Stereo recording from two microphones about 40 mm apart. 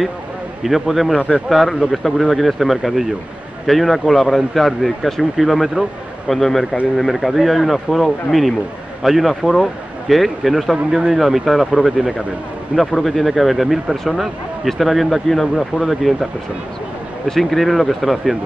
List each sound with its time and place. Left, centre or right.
0.7 s speech: centre
1.1 s speech: right
1.5 s speech: centre
12.9 s speech: centre
17.4 s speech: centre